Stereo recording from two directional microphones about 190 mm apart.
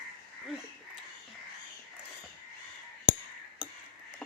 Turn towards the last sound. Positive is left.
turn(degrees=-5)  # may be behind; listen again after turning